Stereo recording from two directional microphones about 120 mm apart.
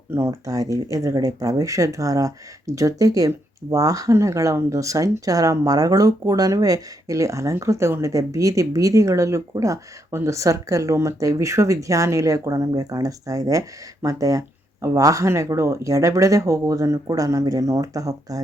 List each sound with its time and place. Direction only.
0.1 s speech: 25° right (ahead or behind)